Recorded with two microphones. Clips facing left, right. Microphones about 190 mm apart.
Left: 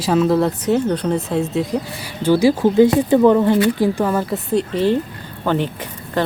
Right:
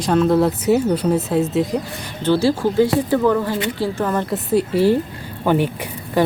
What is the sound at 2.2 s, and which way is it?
Speech, 15° left (ahead or behind).